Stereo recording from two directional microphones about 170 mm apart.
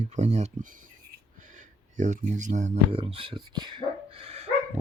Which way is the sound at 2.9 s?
30° right (ahead or behind).